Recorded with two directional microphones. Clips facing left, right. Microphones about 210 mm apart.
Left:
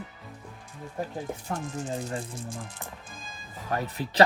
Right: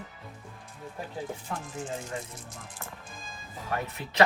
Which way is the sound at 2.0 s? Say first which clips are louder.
Left 4 dB; 35° left (ahead or behind).